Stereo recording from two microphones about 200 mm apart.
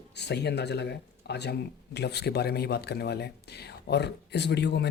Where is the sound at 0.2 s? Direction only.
55° left (ahead or behind).